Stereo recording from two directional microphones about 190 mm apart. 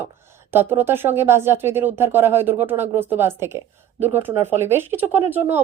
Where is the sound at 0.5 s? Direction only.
10° right (ahead or behind).